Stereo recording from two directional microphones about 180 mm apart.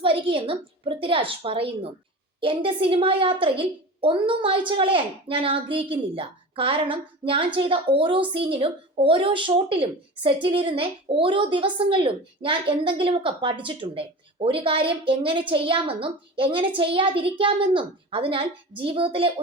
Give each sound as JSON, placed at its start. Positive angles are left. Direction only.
{"t": 0.0, "sound": "a woman's voice", "side_deg": -30}